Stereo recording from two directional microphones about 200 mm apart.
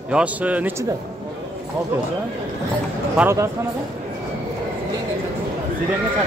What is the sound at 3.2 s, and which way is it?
Speech, 15° right (ahead or behind).